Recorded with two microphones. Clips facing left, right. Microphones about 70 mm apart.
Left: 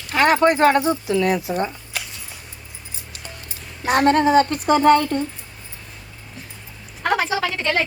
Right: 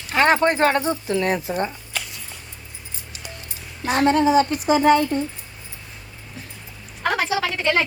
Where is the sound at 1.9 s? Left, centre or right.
Centre.